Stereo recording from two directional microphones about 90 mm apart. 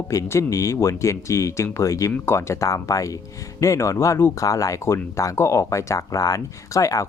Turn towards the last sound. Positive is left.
turn(degrees=35)  # may be behind; listen again after turning